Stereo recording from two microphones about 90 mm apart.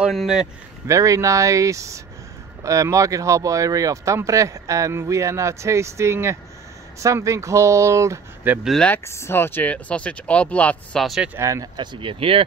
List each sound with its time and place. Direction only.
0.1 s speech: centre (ahead or behind)
0.8 s speech: 35° right (ahead or behind)
8.5 s speech: 20° right (ahead or behind)
9.0 s speech: 30° left (ahead or behind); by 11.0 s 15° left (ahead or behind)
11.0 s speech: centre (ahead or behind)
11.3 s speech: 35° right (ahead or behind)
11.7 s speech: 60° right (ahead or behind); by 12.4 s 90° right